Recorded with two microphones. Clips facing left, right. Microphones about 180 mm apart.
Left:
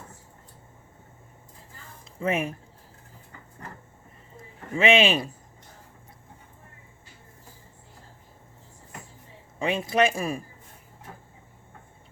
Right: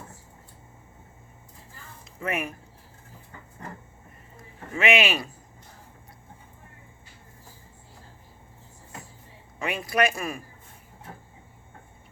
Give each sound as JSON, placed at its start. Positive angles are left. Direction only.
{"t": 2.1, "sound": "speech", "side_deg": 25}
{"t": 4.7, "sound": "speech", "side_deg": 25}
{"t": 9.6, "sound": "speech", "side_deg": 25}